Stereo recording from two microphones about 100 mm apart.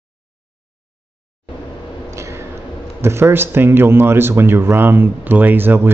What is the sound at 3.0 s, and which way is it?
Speech, 25° right (ahead or behind).